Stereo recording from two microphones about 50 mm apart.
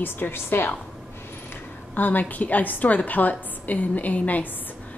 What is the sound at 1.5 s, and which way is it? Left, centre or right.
A woman's voice, left.